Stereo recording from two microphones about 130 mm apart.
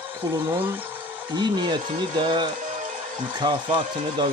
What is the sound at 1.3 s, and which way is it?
Speech, 35° right (ahead or behind).